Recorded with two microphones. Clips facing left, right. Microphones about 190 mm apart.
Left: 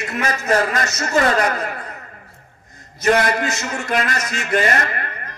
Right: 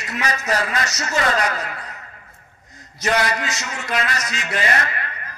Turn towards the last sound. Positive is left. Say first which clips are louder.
# left 3 dB
turn(degrees=50)  # may be behind; listen again after turning